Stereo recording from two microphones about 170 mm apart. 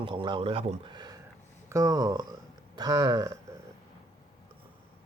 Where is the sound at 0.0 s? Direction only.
30° right (ahead or behind).